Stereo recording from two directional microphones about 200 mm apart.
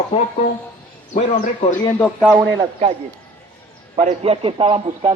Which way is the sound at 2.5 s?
20° right (ahead or behind).